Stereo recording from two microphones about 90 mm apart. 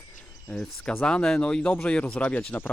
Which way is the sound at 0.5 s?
5° left (ahead or behind).